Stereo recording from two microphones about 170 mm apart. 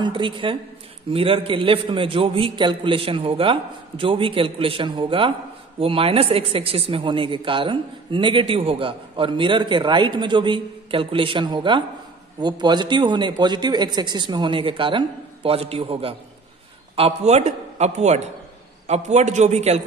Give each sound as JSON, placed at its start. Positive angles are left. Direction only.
{"t": 0.0, "sound": "a man's voice", "side_deg": -30}